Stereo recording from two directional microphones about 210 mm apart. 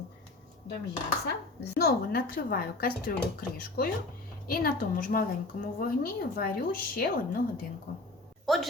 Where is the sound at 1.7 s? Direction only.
50° left (ahead or behind).